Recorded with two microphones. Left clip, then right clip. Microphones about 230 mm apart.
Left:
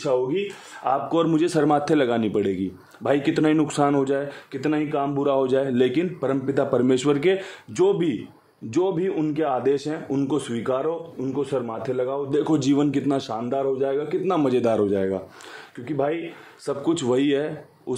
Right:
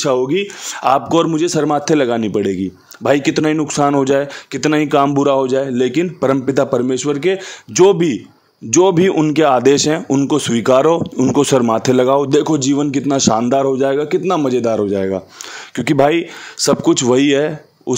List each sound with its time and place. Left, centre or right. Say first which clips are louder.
0.0 s speech: right 7 dB; right
1.1 s a man's voice: right 6 dB; right
5.1 s a man's voice: right 7 dB; right
12.4 s a man's voice: right 6 dB; right
13.3 s speech: right 10 dB; right
14.2 s a man's voice: right 6 dB; right
15.7 s speech: right 12 dB; right
16.8 s a man's voice: right 6 dB; right